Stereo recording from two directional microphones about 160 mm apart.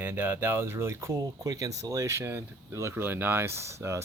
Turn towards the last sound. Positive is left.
turn(degrees=-20)  # may be behind; listen again after turning